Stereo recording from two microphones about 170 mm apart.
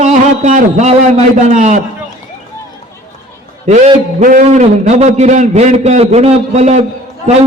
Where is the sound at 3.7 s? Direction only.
45° right (ahead or behind).